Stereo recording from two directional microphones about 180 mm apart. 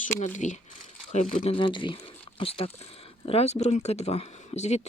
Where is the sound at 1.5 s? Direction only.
30° left (ahead or behind).